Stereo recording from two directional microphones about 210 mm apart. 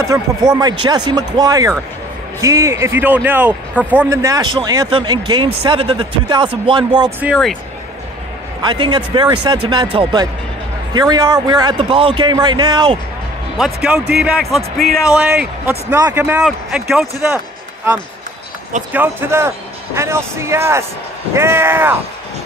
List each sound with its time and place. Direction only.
0.0 s a man's voice: 15° right (ahead or behind)
7.2 s a man's voice: centre (ahead or behind)
8.6 s a man's voice: 20° right (ahead or behind)
13.6 s a man's voice: 5° right (ahead or behind)
18.9 s speech: 10° right (ahead or behind)